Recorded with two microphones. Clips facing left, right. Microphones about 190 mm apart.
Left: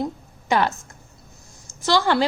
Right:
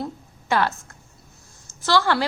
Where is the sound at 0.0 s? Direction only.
20° left (ahead or behind).